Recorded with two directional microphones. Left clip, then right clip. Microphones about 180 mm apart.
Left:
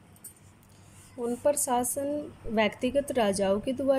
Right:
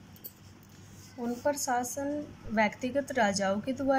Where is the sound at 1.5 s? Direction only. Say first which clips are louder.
Left 3 dB; 20° left (ahead or behind).